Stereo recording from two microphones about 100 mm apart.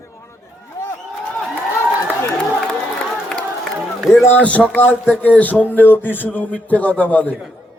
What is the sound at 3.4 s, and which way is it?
Run, 5° left (ahead or behind).